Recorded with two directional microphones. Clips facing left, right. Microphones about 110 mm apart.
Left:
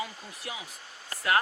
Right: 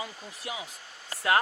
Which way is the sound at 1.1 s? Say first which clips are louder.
Right 1 dB; 25° right (ahead or behind).